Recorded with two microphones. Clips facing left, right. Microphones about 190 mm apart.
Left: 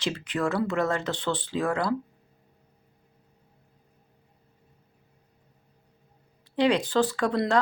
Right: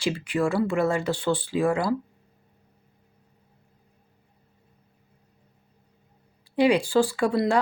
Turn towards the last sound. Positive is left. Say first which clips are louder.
# right 2 dB
turn(degrees=-10)  # may be behind; listen again after turning